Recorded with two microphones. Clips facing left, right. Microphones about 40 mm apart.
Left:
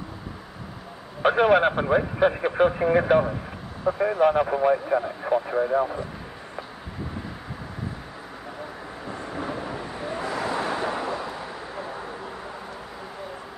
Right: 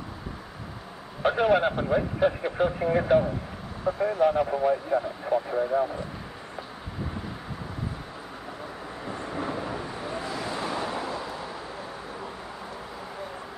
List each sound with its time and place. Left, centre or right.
1.2 s speech: left
9.0 s vehicle: centre
9.9 s vehicle: centre
10.2 s vehicle: left